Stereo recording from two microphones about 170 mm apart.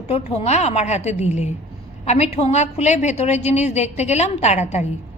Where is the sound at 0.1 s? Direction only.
40° left (ahead or behind).